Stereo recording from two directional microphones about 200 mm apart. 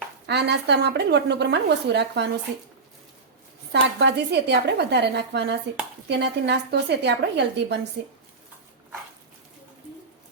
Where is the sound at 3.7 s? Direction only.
55° right (ahead or behind).